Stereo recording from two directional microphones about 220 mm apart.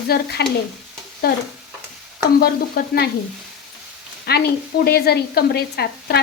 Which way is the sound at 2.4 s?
45° left (ahead or behind).